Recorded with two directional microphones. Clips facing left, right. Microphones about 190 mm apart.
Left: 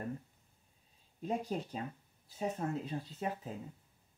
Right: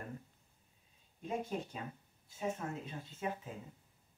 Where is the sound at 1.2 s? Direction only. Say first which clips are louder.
Left 2 dB; 35° left (ahead or behind).